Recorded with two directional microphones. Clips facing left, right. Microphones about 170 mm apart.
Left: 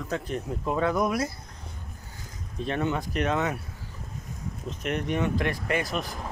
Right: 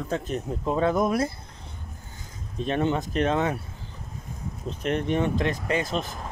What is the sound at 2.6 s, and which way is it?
Speech, 25° right (ahead or behind).